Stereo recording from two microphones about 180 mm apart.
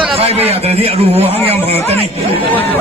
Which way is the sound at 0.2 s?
35° right (ahead or behind).